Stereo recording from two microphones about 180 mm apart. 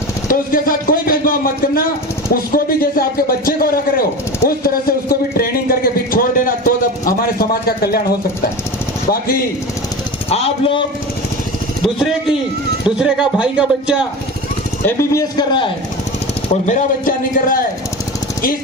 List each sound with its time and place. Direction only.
0.3 s a man's voice: 50° left (ahead or behind)
4.4 s a sound: 55° left (ahead or behind)
7.2 s a man's voice: 55° left (ahead or behind)
10.2 s speech: 35° left (ahead or behind)
13.0 s speech: 5° right (ahead or behind)
14.8 s a man's voice: 20° left (ahead or behind)
16.6 s a man's voice: 45° left (ahead or behind)